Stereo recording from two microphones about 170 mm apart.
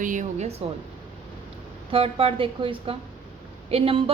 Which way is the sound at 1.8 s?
35° right (ahead or behind).